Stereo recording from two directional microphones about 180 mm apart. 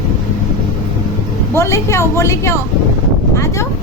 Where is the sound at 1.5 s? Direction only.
15° left (ahead or behind).